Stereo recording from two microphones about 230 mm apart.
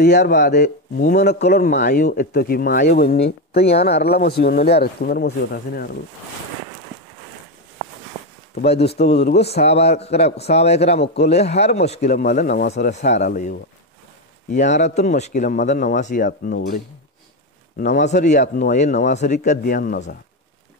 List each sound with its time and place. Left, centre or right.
0.0 s speech: left
8.5 s a man's voice: left
8.8 s speech: left
9.7 s a man's voice: left